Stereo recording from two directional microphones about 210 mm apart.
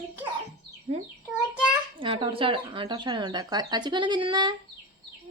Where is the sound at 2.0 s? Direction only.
25° right (ahead or behind).